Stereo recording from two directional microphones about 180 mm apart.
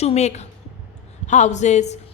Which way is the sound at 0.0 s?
35° left (ahead or behind).